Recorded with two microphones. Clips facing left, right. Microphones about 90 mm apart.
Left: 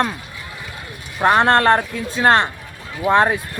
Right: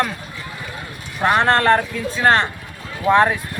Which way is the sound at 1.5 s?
40° left (ahead or behind).